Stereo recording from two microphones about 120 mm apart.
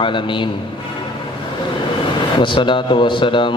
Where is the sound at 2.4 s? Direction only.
45° left (ahead or behind).